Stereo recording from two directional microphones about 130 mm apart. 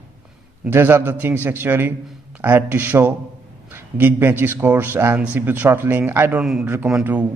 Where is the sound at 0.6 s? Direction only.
15° right (ahead or behind).